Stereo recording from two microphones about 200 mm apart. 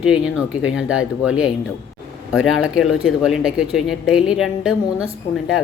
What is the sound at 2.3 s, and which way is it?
Speech, 90° left.